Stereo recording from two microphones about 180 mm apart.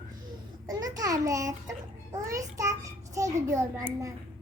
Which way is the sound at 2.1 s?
20° right (ahead or behind).